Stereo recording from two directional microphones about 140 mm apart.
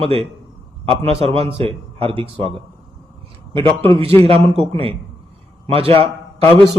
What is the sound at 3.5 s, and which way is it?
A man's voice, 35° right (ahead or behind).